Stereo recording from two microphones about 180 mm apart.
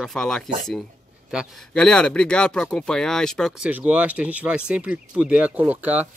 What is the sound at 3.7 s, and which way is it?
Speech, 10° right (ahead or behind).